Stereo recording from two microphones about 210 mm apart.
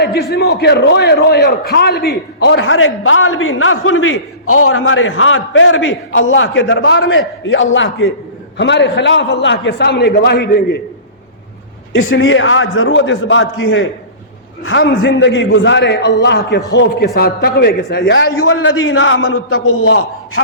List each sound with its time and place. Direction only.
0.0 s a man's voice: 50° left (ahead or behind)
11.9 s a man's voice: 70° left (ahead or behind)
19.6 s a man's voice: 80° left